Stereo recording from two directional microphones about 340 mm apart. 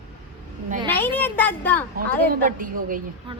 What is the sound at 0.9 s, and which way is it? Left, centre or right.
Speech, centre.